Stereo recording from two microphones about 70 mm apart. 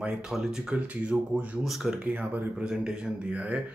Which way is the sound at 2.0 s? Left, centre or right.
Right.